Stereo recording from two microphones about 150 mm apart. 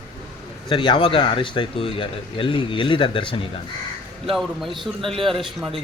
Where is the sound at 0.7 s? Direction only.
35° left (ahead or behind).